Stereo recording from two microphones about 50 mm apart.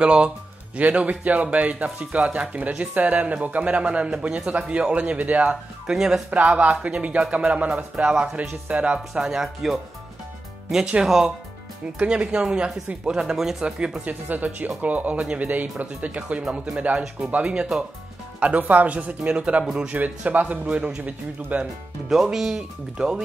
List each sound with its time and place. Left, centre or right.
0.0 s a man's voice: right
5.9 s speech: centre
6.3 s a man's voice: right
9.1 s speech: centre
10.9 s speech: centre
12.0 s speech: right
13.7 s a man's voice: centre
14.3 s a man's voice: right; by 19.9 s centre
19.9 s speech: right
20.6 s speech: centre
21.0 s speech: right
22.1 s speech: centre